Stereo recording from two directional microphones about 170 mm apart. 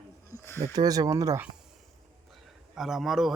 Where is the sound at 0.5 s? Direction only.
20° right (ahead or behind).